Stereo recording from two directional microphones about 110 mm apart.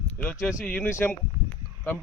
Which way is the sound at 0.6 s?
10° left (ahead or behind).